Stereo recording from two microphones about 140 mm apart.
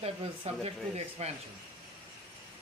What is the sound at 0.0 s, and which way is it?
Speech, 45° right (ahead or behind).